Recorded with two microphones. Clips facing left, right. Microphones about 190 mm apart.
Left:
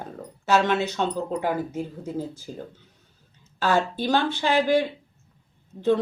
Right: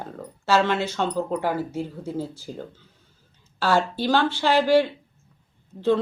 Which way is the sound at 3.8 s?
15° left (ahead or behind).